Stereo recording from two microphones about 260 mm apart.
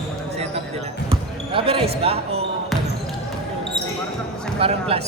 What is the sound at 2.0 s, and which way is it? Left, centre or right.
Speech, right.